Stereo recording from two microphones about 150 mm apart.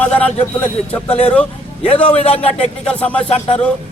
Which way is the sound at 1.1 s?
40° left (ahead or behind).